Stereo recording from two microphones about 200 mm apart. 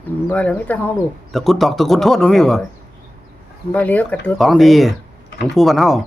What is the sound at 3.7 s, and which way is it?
Speech, 10° left (ahead or behind).